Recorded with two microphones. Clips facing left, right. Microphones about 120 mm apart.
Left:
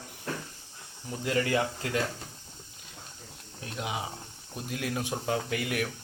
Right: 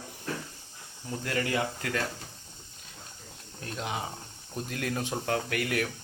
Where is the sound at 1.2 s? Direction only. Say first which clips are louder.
Left 3 dB; 20° left (ahead or behind).